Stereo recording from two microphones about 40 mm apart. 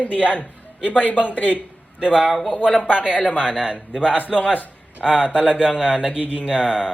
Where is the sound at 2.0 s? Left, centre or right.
Right.